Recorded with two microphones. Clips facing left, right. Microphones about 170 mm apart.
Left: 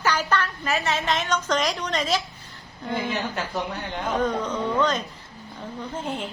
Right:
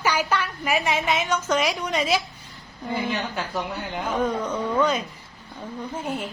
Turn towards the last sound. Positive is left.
turn(degrees=-5)  # may be behind; listen again after turning